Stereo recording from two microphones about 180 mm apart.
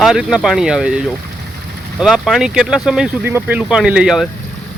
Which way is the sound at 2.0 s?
Centre (ahead or behind).